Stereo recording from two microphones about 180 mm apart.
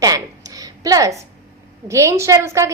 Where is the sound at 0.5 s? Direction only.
20° right (ahead or behind).